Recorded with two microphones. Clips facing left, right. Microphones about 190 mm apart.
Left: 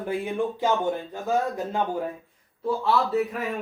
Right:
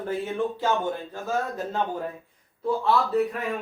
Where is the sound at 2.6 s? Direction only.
5° left (ahead or behind).